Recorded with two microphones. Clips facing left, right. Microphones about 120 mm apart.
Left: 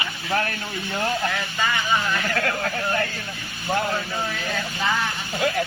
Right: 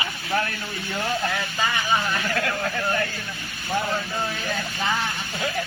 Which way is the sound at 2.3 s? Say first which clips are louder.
Left 1 dB; 45° left (ahead or behind).